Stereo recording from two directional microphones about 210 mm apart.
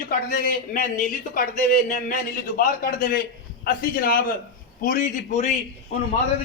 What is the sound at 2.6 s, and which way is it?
A man's voice, 40° left (ahead or behind).